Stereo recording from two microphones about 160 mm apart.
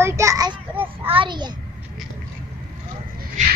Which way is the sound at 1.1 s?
30° right (ahead or behind).